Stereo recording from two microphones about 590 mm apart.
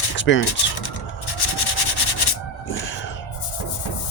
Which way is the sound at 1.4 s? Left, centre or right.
Left.